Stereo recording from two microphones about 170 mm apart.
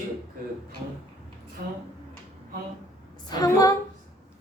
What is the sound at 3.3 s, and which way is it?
Speech, 20° left (ahead or behind).